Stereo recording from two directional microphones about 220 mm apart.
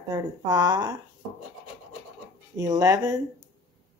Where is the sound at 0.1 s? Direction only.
15° right (ahead or behind).